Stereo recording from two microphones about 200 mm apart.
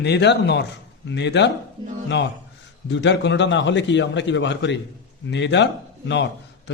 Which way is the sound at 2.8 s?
60° left (ahead or behind).